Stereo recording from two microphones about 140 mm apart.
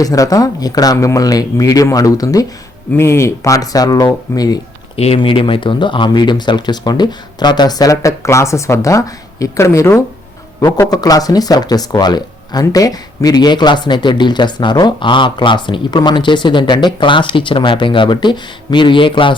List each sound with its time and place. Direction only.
0.0 s speech: 25° left (ahead or behind)
4.9 s speech: 45° left (ahead or behind)